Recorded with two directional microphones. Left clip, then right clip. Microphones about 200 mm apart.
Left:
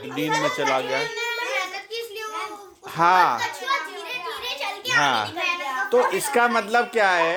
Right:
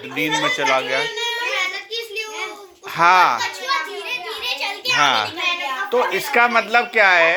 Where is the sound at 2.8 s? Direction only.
35° left (ahead or behind).